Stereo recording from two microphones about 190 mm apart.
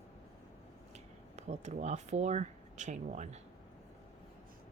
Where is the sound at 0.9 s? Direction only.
35° right (ahead or behind).